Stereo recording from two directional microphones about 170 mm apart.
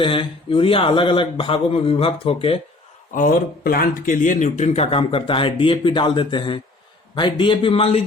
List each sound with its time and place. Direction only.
0.0 s speech: 30° left (ahead or behind)
3.2 s speech: 60° left (ahead or behind); by 8.0 s 35° left (ahead or behind)